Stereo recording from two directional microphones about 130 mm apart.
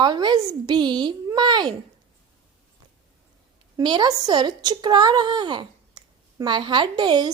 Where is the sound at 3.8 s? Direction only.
35° right (ahead or behind).